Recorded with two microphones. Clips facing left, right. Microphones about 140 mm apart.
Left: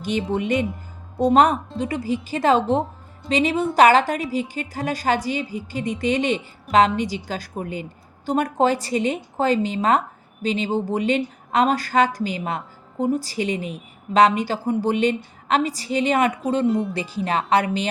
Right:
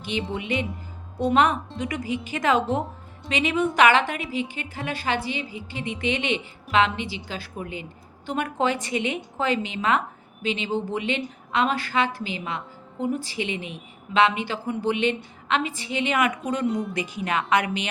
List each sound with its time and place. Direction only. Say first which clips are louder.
0.3 s speech: left 6 dB; 45° left (ahead or behind)
16.6 s speech: left 4 dB; centre (ahead or behind)
16.9 s speech: left 3 dB; 30° left (ahead or behind)